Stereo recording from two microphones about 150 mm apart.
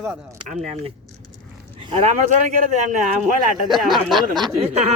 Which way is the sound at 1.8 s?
35° right (ahead or behind).